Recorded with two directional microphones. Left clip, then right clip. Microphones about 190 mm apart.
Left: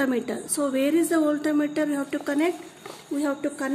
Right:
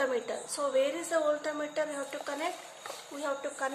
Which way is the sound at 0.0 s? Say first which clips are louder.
Left 5 dB; 55° left (ahead or behind).